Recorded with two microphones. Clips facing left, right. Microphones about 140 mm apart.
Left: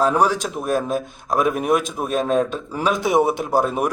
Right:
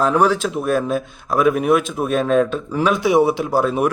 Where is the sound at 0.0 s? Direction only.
40° left (ahead or behind).